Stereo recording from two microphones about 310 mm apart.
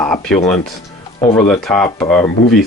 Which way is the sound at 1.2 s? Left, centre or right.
Centre.